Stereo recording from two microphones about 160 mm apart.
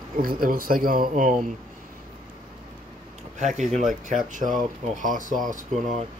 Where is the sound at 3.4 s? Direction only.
45° right (ahead or behind).